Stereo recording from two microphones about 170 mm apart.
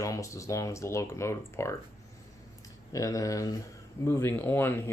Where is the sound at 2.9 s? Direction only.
20° left (ahead or behind).